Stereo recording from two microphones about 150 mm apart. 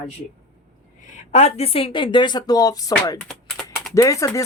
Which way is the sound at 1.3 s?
45° left (ahead or behind).